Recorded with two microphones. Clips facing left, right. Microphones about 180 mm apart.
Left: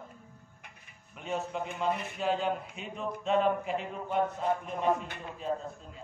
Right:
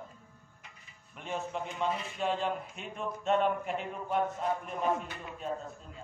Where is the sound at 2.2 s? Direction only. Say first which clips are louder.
Even; centre (ahead or behind).